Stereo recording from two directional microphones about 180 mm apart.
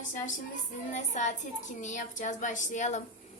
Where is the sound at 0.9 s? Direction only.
40° left (ahead or behind).